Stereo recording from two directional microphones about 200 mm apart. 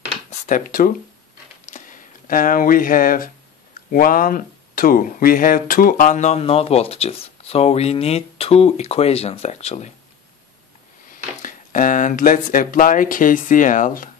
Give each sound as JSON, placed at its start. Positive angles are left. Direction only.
{"t": 0.3, "sound": "speech", "side_deg": 40}
{"t": 1.7, "sound": "a sound", "side_deg": 40}
{"t": 3.9, "sound": "speech", "side_deg": 45}
{"t": 11.4, "sound": "speech", "side_deg": 40}